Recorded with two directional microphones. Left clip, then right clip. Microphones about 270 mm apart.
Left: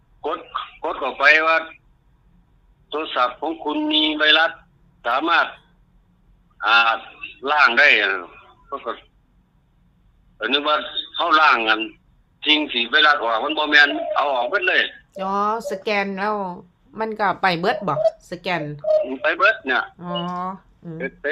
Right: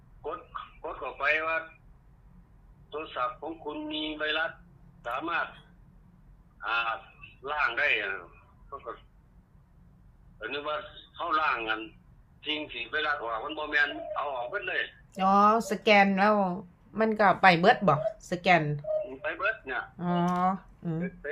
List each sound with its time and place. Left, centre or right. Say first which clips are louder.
0.2 s telephone: left 12 dB; left
2.9 s a man's voice: left 12 dB; left
6.6 s a man's voice: left 14 dB; left
10.3 s a man's voice: left 14 dB; left
15.1 s speech: right 1 dB; centre
18.9 s a man's voice: left 13 dB; left
20.0 s speech: left 2 dB; centre